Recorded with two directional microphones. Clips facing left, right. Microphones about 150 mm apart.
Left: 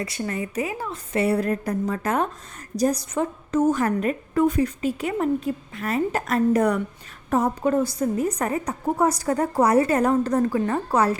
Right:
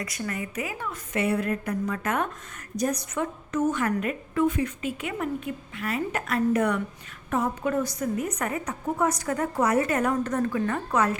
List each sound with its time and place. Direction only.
0.0 s a woman's voice: 30° left (ahead or behind)